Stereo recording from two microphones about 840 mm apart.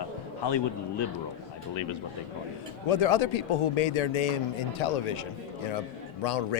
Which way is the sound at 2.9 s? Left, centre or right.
Left.